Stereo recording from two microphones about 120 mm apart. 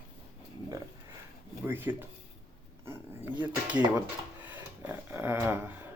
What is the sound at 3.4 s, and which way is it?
Speech, 10° right (ahead or behind).